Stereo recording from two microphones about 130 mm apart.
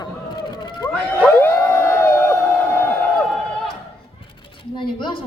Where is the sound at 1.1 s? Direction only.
15° left (ahead or behind).